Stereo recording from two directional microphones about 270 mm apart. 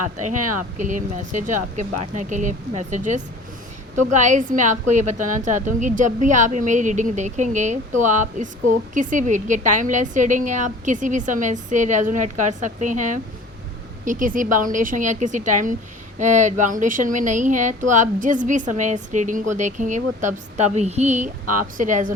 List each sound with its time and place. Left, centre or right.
0.3 s speech: right
0.8 s a woman's voice: right